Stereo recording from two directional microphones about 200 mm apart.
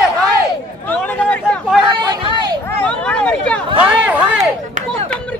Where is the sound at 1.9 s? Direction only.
25° right (ahead or behind).